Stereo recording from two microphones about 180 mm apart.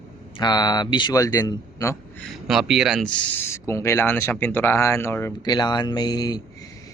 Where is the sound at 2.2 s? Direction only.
Centre (ahead or behind).